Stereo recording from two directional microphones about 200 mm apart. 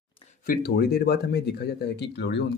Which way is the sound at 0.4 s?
50° left (ahead or behind).